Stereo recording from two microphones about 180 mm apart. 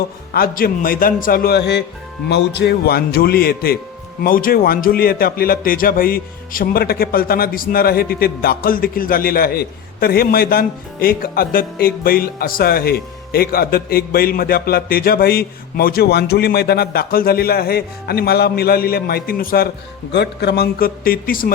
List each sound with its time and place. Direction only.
0.3 s a man's voice: 55° left (ahead or behind)
20.1 s speech: 65° left (ahead or behind)